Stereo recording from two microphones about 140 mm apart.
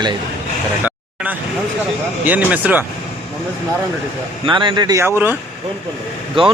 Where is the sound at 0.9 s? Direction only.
10° right (ahead or behind).